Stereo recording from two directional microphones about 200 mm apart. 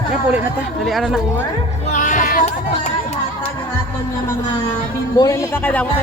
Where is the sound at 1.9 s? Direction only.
40° left (ahead or behind).